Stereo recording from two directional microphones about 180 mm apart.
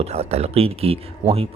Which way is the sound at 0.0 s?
35° right (ahead or behind).